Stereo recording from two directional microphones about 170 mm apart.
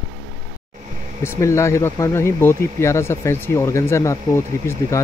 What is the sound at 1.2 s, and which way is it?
Speech, 15° left (ahead or behind).